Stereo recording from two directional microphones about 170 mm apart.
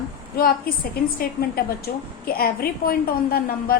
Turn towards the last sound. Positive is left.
turn(degrees=60)  # may be behind; listen again after turning